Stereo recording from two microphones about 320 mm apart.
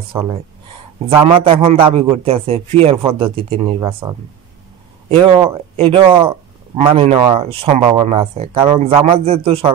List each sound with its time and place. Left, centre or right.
0.1 s a man's voice: centre
5.2 s a man's voice: centre